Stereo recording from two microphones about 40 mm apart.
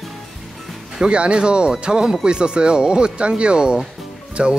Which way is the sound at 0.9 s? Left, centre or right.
Right.